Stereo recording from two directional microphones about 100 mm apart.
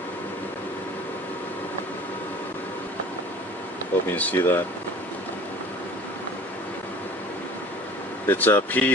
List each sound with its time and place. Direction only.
4.1 s speech: 20° left (ahead or behind)
8.3 s speech: 20° left (ahead or behind)